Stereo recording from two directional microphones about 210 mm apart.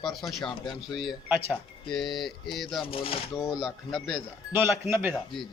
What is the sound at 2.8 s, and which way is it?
Speech, 25° left (ahead or behind).